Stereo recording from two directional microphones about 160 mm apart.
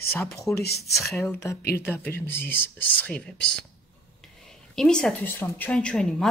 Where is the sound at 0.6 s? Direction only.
90° left.